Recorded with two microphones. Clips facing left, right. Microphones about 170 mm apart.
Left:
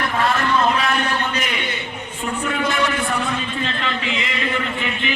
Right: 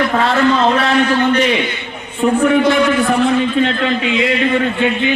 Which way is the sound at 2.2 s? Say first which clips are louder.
Right 13 dB; 75° right (ahead or behind).